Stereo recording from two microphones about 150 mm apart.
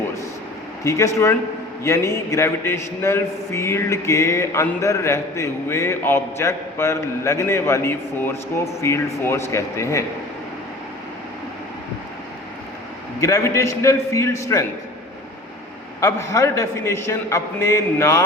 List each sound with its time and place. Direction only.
0.9 s a man's voice: 20° left (ahead or behind)
13.1 s a man's voice: 20° left (ahead or behind)
16.0 s a man's voice: 20° left (ahead or behind)